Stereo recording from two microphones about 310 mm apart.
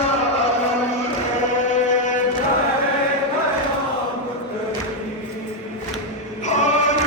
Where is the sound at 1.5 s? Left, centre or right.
Left.